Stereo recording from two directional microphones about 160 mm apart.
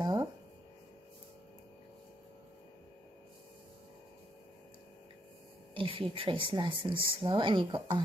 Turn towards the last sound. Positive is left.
turn(degrees=-30)  # may be behind; listen again after turning